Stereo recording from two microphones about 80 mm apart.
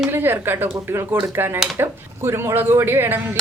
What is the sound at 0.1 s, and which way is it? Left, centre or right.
Speech, right.